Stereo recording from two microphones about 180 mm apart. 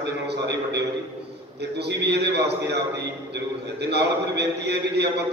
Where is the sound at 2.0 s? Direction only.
70° right (ahead or behind).